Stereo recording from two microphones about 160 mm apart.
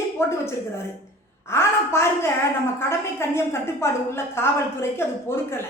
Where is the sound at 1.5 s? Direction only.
15° left (ahead or behind).